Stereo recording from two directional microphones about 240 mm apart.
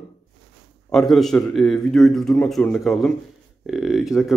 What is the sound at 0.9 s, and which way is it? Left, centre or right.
A man's voice, centre.